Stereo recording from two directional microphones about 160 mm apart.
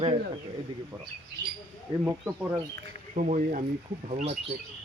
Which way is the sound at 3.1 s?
50° right (ahead or behind).